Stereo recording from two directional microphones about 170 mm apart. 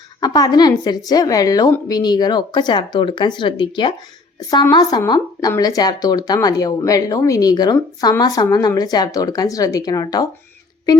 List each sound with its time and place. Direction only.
0.2 s speech: 25° left (ahead or behind)